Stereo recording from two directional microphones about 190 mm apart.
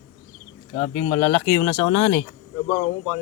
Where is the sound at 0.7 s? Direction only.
25° left (ahead or behind).